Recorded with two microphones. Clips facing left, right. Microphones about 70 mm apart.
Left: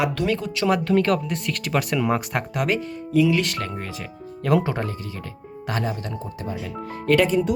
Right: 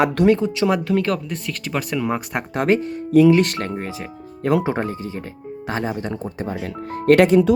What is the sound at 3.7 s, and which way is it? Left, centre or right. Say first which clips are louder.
Speech: right 4 dB; centre.